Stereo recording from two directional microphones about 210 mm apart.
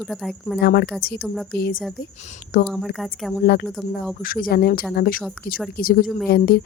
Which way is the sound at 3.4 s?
50° left (ahead or behind).